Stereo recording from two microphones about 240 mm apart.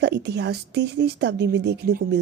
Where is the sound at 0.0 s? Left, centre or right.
Right.